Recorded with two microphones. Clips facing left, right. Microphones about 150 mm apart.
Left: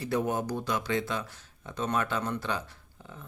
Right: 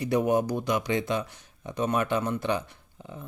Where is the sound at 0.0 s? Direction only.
15° right (ahead or behind).